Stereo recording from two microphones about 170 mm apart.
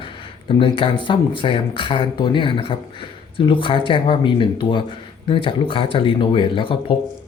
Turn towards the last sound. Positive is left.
turn(degrees=30)  # may be behind; listen again after turning